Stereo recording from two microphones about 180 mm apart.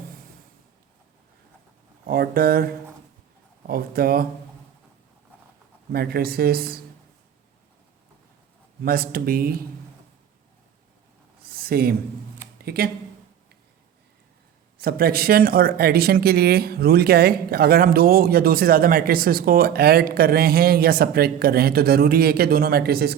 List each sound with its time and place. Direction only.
2.0 s speech: 55° right (ahead or behind)
5.9 s speech: 55° right (ahead or behind)
8.8 s speech: 55° right (ahead or behind)
11.4 s a sound: 55° right (ahead or behind)
14.8 s speech: 55° right (ahead or behind)